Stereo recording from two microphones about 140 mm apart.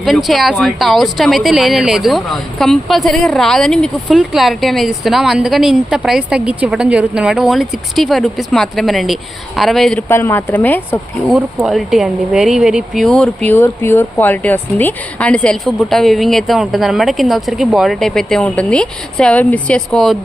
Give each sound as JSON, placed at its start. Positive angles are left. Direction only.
{"t": 0.0, "sound": "speech", "side_deg": 0}
{"t": 10.1, "sound": "speech", "side_deg": 15}
{"t": 11.3, "sound": "speech", "side_deg": 0}